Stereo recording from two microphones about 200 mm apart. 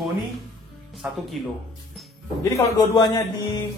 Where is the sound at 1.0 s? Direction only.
Centre (ahead or behind).